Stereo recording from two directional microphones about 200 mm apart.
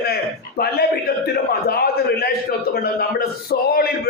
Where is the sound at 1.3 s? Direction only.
50° left (ahead or behind).